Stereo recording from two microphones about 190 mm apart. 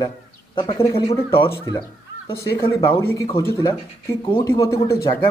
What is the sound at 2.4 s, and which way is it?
Speech, 15° left (ahead or behind).